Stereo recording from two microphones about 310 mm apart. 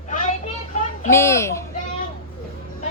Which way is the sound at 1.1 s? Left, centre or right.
Centre.